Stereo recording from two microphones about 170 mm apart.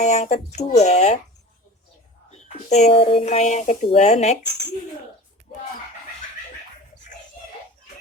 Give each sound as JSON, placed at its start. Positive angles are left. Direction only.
{"t": 0.0, "sound": "speech", "side_deg": 40}
{"t": 2.3, "sound": "speech", "side_deg": 40}